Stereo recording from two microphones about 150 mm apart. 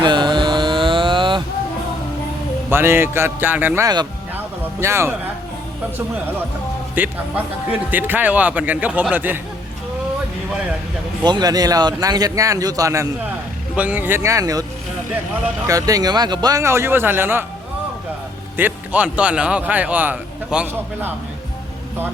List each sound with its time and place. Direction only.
0.0 s mantra: 30° right (ahead or behind)
2.6 s a man's voice: 15° right (ahead or behind)
7.0 s a man's voice: 10° right (ahead or behind)
11.2 s speech: 30° right (ahead or behind)
13.7 s a man's voice: 10° right (ahead or behind)
15.6 s speech: 25° right (ahead or behind)
18.5 s a man's voice: 10° right (ahead or behind)